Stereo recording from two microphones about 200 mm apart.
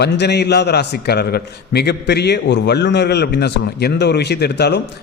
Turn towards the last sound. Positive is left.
turn(degrees=55)  # may be behind; listen again after turning